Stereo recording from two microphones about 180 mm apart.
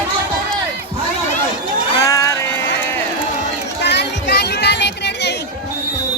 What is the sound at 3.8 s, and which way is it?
Chatter, 70° left (ahead or behind).